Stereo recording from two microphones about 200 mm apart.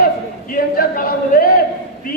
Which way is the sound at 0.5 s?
45° left (ahead or behind).